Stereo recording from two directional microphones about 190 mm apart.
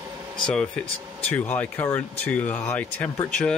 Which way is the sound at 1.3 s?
10° left (ahead or behind).